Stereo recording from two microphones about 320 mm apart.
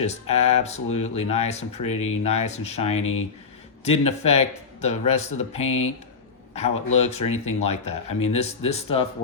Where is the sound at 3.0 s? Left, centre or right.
Left.